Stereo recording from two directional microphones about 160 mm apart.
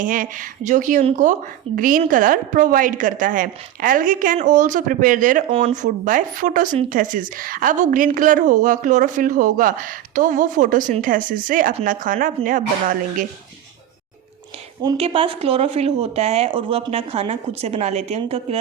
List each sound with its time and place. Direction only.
0.0 s a woman's voice: 55° right (ahead or behind)
14.9 s speech: 35° right (ahead or behind)